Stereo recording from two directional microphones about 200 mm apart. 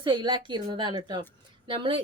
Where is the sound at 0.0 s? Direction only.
20° right (ahead or behind).